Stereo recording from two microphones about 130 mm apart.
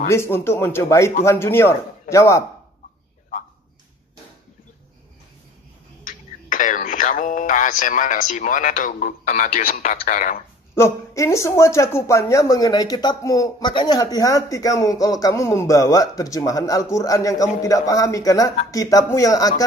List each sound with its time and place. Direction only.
0.1 s speech: 20° left (ahead or behind)
6.0 s a sound: 90° left
10.7 s speech: 20° left (ahead or behind)